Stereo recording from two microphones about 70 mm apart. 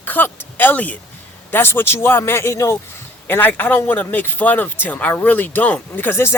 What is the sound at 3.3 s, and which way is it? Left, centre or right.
A man's voice, left.